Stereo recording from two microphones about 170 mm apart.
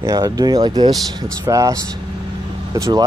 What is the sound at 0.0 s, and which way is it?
Speech, 20° right (ahead or behind).